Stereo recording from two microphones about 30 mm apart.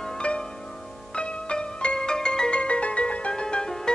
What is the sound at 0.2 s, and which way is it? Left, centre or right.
Music, left.